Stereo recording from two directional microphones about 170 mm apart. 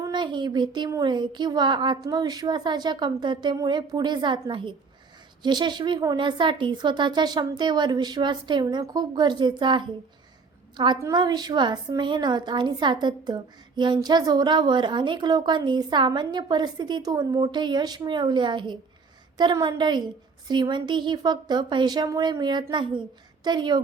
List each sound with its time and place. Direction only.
0.0 s a woman's voice: 25° right (ahead or behind)
11.0 s a woman's voice: 25° right (ahead or behind)